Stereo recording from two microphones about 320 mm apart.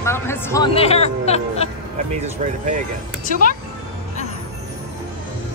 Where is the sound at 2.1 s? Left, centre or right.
Right.